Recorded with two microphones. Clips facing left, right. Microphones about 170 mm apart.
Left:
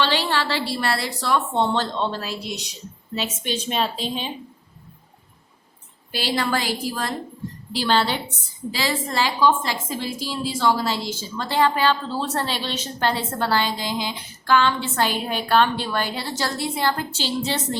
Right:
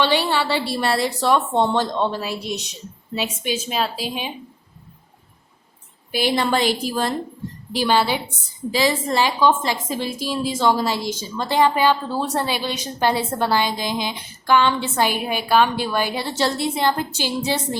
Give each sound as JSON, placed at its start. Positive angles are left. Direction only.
{"t": 0.0, "sound": "a woman's voice", "side_deg": -15}
{"t": 6.1, "sound": "a woman's voice", "side_deg": -15}
{"t": 7.7, "sound": "a woman's voice", "side_deg": -15}